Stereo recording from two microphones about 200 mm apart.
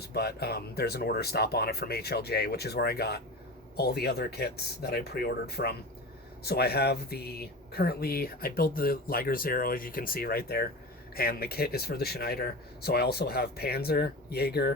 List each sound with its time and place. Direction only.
0.1 s speech: 55° left (ahead or behind)